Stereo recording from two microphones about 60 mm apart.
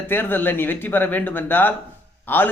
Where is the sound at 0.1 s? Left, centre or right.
Left.